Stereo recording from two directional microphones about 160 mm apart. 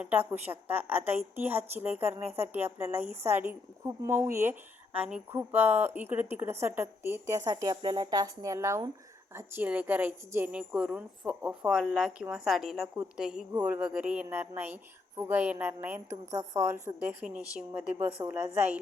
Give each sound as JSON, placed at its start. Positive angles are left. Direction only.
{"t": 0.0, "sound": "a woman's voice", "side_deg": -10}
{"t": 17.2, "sound": "a woman's voice", "side_deg": -5}